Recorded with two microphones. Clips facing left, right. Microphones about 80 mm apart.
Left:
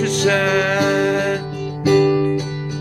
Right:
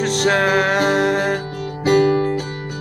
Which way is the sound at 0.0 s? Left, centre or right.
Right.